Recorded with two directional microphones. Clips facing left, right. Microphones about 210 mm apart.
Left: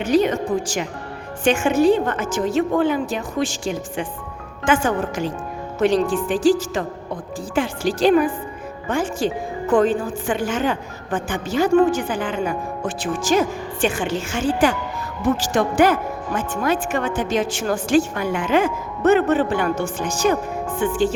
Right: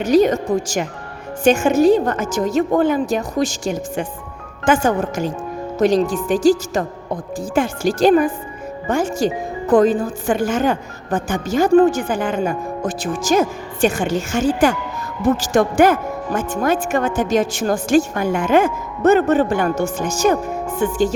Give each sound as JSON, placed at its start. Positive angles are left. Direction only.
{"t": 0.0, "sound": "a woman's voice", "side_deg": -40}